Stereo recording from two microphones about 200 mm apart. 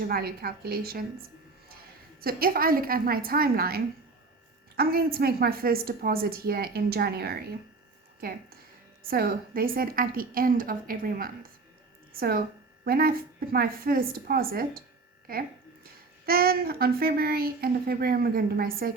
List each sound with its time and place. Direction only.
0.0 s speech: 50° right (ahead or behind)
2.2 s speech: 50° right (ahead or behind)
4.8 s speech: 50° right (ahead or behind)
9.0 s a woman's voice: 50° right (ahead or behind)